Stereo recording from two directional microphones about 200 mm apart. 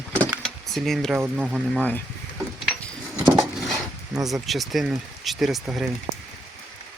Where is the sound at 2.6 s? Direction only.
Centre (ahead or behind).